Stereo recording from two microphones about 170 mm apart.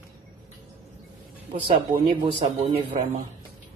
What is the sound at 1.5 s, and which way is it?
Speech, 35° right (ahead or behind).